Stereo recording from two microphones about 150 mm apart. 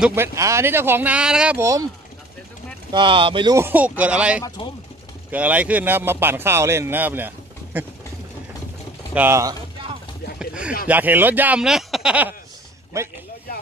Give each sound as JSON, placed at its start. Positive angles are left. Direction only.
{"t": 0.0, "sound": "speech", "side_deg": -15}
{"t": 1.6, "sound": "speech", "side_deg": -20}
{"t": 2.9, "sound": "speech", "side_deg": -35}
{"t": 3.5, "sound": "speech", "side_deg": -15}
{"t": 9.1, "sound": "speech", "side_deg": -15}
{"t": 10.4, "sound": "speech", "side_deg": -5}
{"t": 12.9, "sound": "speech", "side_deg": -20}